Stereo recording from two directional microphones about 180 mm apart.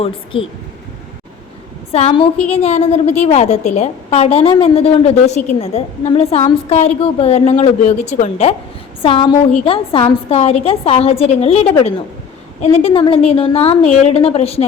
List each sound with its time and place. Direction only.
0.0 s speech: 30° left (ahead or behind)
1.9 s a woman's voice: 35° left (ahead or behind)
12.8 s a woman's voice: 30° left (ahead or behind)